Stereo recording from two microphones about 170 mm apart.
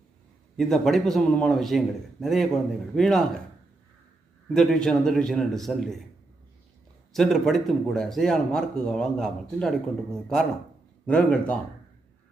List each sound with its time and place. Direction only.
0.5 s speech: centre (ahead or behind)
4.5 s speech: 5° left (ahead or behind)
7.1 s speech: centre (ahead or behind)